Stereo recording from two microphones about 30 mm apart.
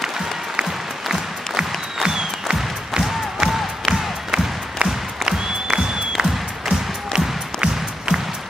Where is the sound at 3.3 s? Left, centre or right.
Centre.